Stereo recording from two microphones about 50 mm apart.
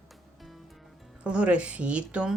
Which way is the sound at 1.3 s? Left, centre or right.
Right.